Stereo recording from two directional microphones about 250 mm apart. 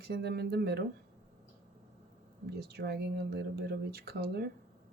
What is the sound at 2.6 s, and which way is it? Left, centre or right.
Speech, right.